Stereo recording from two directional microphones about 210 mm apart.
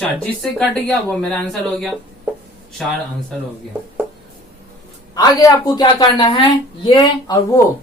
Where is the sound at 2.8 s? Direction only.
Centre (ahead or behind).